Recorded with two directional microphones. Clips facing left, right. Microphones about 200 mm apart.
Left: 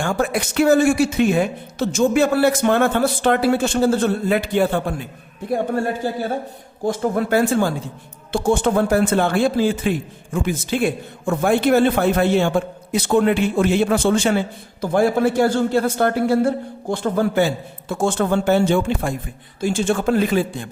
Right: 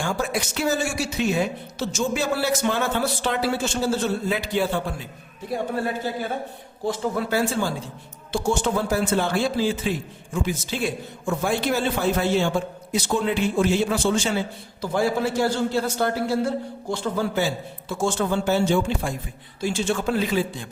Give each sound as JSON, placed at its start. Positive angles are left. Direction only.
{"t": 0.0, "sound": "a man's voice", "side_deg": 55}